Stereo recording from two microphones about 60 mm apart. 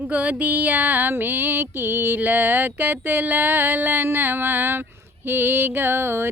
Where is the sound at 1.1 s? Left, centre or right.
Right.